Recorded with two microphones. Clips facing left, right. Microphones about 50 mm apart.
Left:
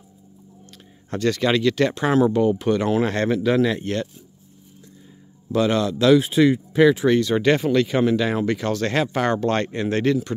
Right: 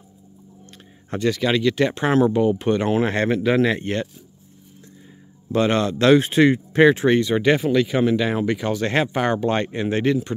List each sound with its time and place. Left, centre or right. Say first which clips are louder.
1.3 s speech: left 1 dB; centre
2.0 s speech: even; right
5.5 s speech: right 1 dB; right
7.1 s speech: even; right
7.3 s speech: even; centre